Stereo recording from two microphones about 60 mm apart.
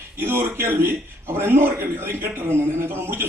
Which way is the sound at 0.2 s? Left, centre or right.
Right.